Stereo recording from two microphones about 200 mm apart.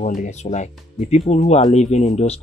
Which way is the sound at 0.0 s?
40° left (ahead or behind).